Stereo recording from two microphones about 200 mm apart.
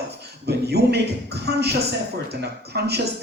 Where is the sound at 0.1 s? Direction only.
55° right (ahead or behind).